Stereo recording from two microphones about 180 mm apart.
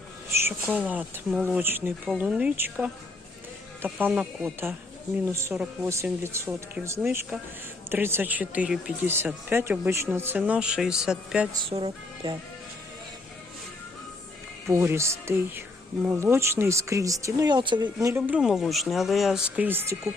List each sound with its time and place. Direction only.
0.3 s speech: 15° right (ahead or behind)
11.6 s music: 30° right (ahead or behind)
14.7 s speech: 15° right (ahead or behind)
18.1 s speech: 5° right (ahead or behind)